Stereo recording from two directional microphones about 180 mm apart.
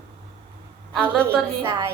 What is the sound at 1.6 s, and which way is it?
Speech, 15° right (ahead or behind).